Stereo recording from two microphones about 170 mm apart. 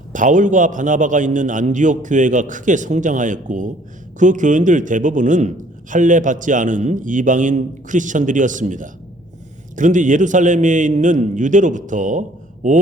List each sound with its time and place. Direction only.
0.1 s a man's voice: 50° right (ahead or behind)